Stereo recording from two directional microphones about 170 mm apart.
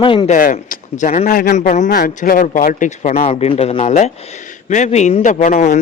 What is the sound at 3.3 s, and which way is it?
A man's voice, 35° left (ahead or behind).